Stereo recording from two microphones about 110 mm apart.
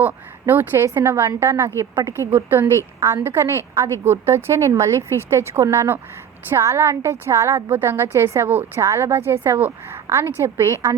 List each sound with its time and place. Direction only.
0.0 s a woman's voice: 20° right (ahead or behind)